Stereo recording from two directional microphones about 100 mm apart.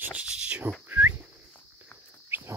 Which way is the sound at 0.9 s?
20° right (ahead or behind).